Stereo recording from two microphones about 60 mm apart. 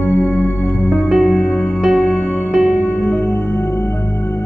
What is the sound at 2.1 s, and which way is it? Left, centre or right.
Music, left.